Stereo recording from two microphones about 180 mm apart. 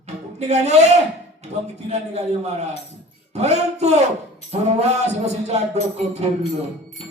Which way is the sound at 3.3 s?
35° right (ahead or behind).